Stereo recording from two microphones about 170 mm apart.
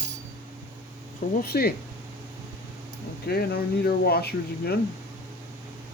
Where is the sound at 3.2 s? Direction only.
65° left (ahead or behind).